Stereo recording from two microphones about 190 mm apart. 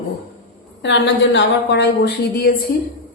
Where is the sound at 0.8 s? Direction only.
70° left (ahead or behind).